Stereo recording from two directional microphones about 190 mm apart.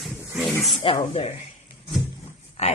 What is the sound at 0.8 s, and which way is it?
Speech, 25° left (ahead or behind).